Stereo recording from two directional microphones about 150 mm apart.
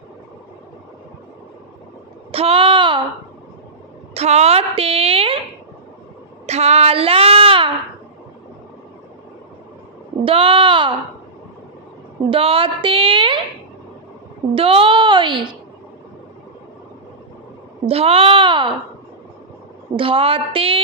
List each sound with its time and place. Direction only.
2.3 s a sound: 40° right (ahead or behind)
4.1 s a woman's voice: 45° right (ahead or behind)
6.4 s child singing: 45° right (ahead or behind)
10.2 s speech: 35° right (ahead or behind)
12.3 s a woman's voice: 35° right (ahead or behind)
14.5 s a woman's voice: 40° right (ahead or behind)
17.8 s a woman's voice: 40° right (ahead or behind)
20.0 s a woman's voice: 35° right (ahead or behind)